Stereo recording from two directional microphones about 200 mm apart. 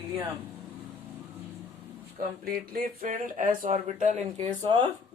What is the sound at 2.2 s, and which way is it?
Speech, 45° right (ahead or behind).